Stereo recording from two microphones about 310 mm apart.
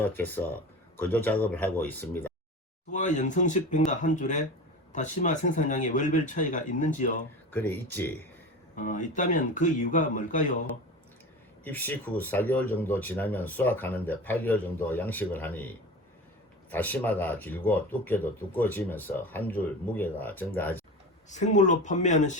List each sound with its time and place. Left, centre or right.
0.0 s speech: centre
2.9 s speech: left
7.5 s speech: centre
8.7 s speech: left
11.6 s speech: centre
16.7 s speech: centre
21.2 s speech: left